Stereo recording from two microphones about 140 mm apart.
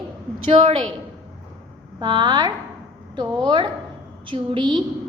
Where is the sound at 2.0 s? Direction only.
30° right (ahead or behind).